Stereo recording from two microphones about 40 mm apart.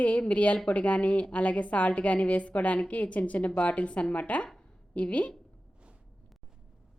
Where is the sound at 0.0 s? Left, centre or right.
Left.